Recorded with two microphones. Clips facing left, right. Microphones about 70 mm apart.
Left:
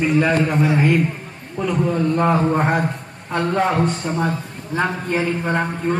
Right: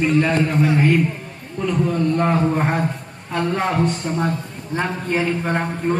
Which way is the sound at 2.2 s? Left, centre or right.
Left.